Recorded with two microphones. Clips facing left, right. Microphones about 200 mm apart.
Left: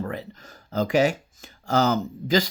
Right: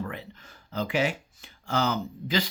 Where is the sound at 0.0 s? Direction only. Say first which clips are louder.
Left 4 dB; 40° left (ahead or behind).